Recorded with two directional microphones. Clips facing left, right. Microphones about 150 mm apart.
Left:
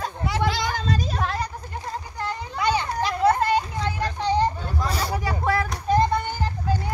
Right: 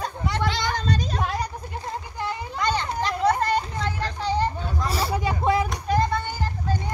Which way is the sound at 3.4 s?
10° left (ahead or behind).